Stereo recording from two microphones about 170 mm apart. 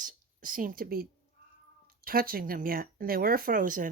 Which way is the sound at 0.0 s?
50° right (ahead or behind).